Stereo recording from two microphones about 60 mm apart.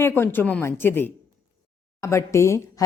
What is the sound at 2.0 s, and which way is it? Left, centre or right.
Speech, left.